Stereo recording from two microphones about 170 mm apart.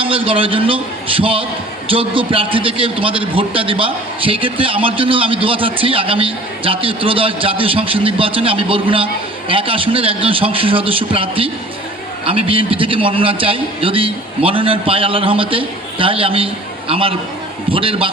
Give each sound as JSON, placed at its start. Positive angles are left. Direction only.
{"t": 0.0, "sound": "a man's voice", "side_deg": -30}